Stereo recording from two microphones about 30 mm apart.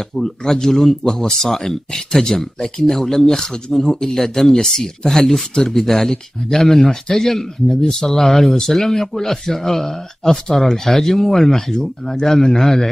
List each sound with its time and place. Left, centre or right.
0.2 s a man's voice: centre
4.1 s speech: centre